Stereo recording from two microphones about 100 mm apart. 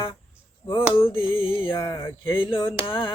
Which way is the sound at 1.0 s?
60° left (ahead or behind).